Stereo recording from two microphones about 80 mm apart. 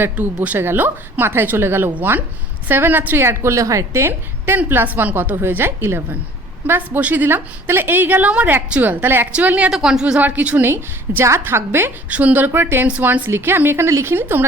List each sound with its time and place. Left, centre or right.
0.0 s a woman's voice: right
9.7 s a woman's voice: centre
10.7 s a woman's voice: right
12.0 s a woman's voice: centre